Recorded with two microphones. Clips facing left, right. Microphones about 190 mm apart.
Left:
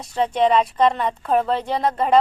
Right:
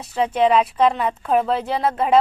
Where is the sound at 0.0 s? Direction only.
5° right (ahead or behind).